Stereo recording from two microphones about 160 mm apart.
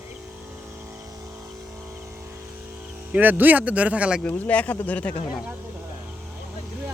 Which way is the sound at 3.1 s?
10° right (ahead or behind).